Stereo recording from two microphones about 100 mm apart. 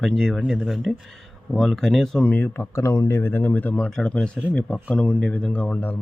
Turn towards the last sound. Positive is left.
turn(degrees=20)  # may be behind; listen again after turning